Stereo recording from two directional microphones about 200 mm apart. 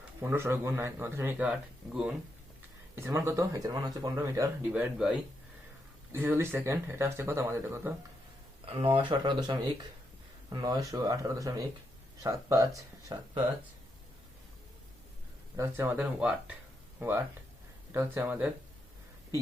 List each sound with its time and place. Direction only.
0.2 s speech: 10° right (ahead or behind)
8.8 s speech: 25° right (ahead or behind)
15.5 s speech: 15° right (ahead or behind)